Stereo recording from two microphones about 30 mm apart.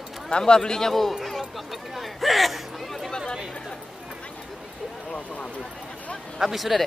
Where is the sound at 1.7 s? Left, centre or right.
Centre.